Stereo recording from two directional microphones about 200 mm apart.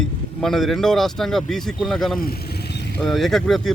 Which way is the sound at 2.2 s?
50° left (ahead or behind).